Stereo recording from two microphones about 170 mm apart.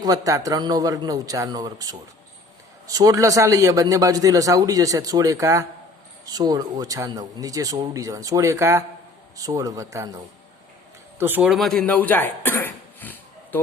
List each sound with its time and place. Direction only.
0.0 s a man's voice: 20° right (ahead or behind); by 13.6 s 10° left (ahead or behind)